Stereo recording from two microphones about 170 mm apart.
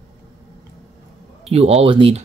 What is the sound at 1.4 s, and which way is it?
Speech, 35° right (ahead or behind).